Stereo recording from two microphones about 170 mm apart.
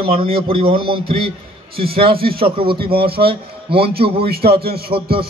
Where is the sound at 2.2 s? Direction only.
60° right (ahead or behind).